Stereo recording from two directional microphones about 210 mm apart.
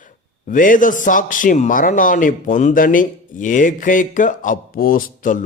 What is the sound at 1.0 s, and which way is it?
Speech, 40° left (ahead or behind).